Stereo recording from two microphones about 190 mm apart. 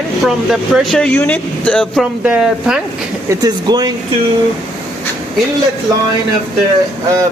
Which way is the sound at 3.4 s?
20° right (ahead or behind).